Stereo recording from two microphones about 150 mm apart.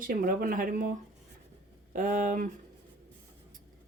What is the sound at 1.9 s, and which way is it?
Speech, 60° right (ahead or behind).